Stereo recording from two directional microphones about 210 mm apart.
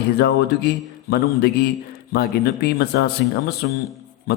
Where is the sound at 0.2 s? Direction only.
50° left (ahead or behind).